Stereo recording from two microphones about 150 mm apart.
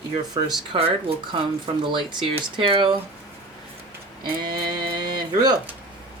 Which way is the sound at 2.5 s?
35° right (ahead or behind).